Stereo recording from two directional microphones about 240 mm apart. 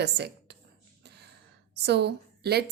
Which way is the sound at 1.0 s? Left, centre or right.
Right.